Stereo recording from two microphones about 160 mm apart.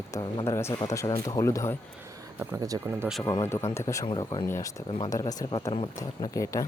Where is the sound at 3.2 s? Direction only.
20° left (ahead or behind).